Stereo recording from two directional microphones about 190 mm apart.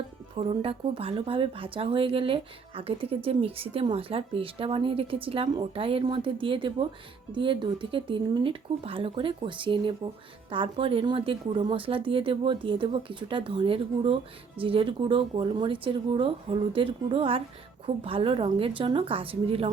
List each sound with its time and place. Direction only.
0.3 s speech: 30° right (ahead or behind)